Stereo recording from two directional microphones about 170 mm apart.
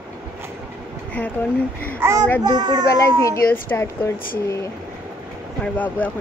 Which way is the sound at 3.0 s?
15° left (ahead or behind).